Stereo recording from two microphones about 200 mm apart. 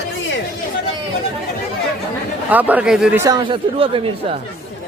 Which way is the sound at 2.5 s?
10° right (ahead or behind).